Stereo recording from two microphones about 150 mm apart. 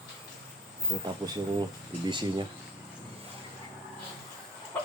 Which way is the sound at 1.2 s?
30° right (ahead or behind).